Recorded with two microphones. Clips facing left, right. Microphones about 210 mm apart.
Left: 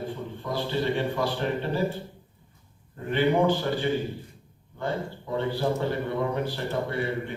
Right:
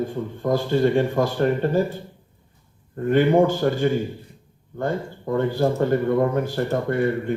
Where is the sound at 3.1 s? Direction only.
45° right (ahead or behind).